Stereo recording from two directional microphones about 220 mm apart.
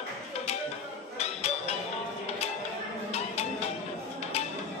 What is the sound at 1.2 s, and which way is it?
Music, 30° left (ahead or behind).